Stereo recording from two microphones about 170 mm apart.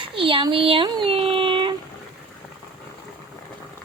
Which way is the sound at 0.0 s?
30° right (ahead or behind).